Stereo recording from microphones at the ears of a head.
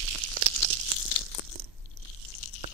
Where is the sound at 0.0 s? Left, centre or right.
Right.